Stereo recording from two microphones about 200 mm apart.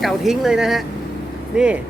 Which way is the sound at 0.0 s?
Centre (ahead or behind).